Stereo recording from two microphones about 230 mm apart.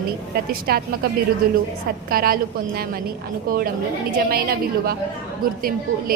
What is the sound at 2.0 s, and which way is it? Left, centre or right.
A woman's voice, right.